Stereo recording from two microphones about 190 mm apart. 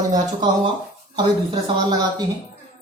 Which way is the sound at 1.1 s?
25° right (ahead or behind).